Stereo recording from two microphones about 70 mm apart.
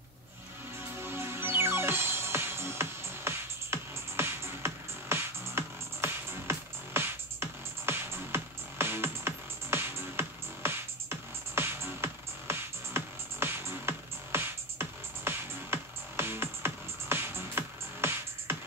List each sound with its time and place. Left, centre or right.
0.9 s music: right